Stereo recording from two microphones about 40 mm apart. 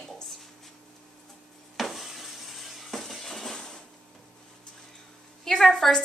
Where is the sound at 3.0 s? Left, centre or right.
Centre.